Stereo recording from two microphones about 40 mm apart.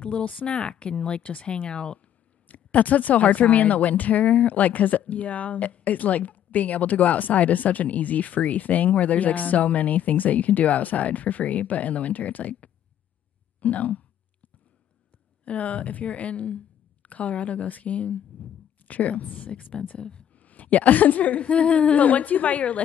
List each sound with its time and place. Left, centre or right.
0.2 s a woman's voice: left
2.4 s a woman's voice: left
15.4 s speech: left
20.3 s a woman's voice: left